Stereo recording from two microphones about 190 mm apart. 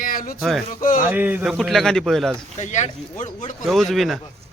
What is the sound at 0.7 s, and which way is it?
Speech, 45° left (ahead or behind).